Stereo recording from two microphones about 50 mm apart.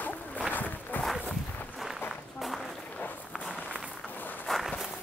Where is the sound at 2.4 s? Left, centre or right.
Centre.